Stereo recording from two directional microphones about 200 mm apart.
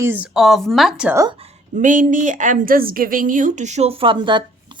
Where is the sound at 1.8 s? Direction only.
40° right (ahead or behind).